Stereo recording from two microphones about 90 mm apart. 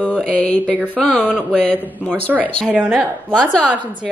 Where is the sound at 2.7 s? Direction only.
10° right (ahead or behind).